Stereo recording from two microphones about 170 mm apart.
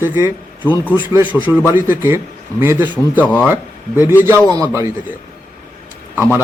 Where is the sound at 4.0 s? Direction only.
10° right (ahead or behind).